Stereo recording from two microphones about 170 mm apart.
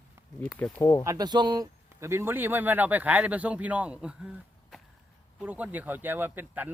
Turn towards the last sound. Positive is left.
turn(degrees=-10)  # may be behind; listen again after turning